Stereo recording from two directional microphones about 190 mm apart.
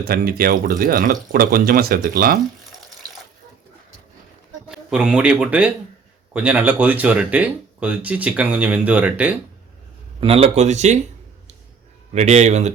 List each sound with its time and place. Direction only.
0.0 s speech: 50° right (ahead or behind)
4.7 s speech: 5° right (ahead or behind)
10.2 s speech: 30° right (ahead or behind)
12.1 s speech: 35° right (ahead or behind)